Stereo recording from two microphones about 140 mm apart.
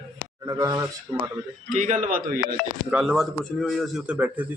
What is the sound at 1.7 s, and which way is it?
Speech, 60° right (ahead or behind).